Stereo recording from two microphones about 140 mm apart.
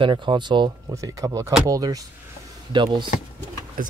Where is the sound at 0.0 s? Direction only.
35° right (ahead or behind).